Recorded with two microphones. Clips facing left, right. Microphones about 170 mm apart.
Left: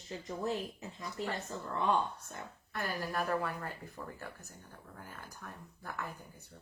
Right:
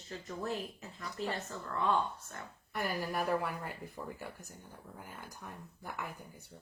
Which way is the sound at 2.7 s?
15° right (ahead or behind).